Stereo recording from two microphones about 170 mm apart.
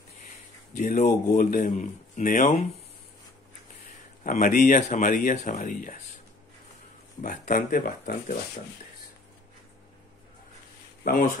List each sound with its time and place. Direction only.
0.7 s speech: 45° left (ahead or behind)
4.2 s speech: 50° left (ahead or behind)
7.2 s speech: 50° left (ahead or behind)
11.1 s speech: 55° left (ahead or behind)